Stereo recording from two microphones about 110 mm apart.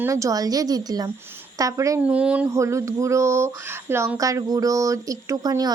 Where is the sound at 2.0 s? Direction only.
10° right (ahead or behind).